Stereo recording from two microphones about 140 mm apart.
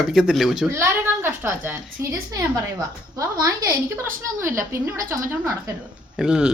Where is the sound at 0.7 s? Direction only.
20° right (ahead or behind).